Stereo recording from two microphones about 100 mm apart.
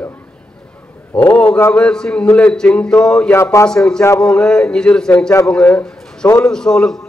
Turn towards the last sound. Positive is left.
turn(degrees=5)  # may be behind; listen again after turning